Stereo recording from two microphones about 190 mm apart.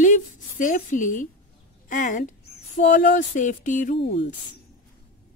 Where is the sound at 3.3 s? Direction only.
40° left (ahead or behind).